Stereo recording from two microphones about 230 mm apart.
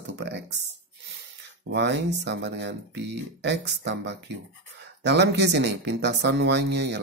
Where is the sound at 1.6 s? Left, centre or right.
Right.